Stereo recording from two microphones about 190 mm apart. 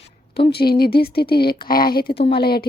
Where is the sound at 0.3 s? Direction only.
55° left (ahead or behind).